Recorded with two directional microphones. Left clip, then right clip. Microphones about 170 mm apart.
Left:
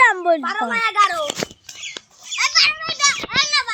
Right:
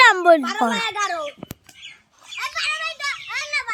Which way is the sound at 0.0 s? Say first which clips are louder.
Right 2 dB; 35° right (ahead or behind).